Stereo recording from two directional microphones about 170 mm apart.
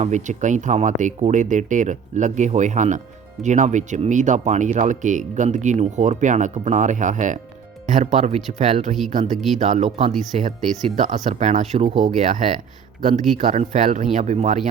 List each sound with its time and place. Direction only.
0.0 s speech: 45° right (ahead or behind)